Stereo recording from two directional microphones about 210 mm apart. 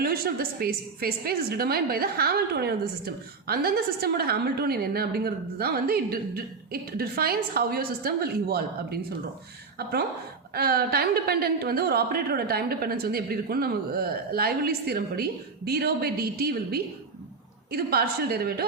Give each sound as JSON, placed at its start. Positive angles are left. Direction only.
{"t": 0.0, "sound": "a woman's voice", "side_deg": -45}
{"t": 10.5, "sound": "a woman's voice", "side_deg": -50}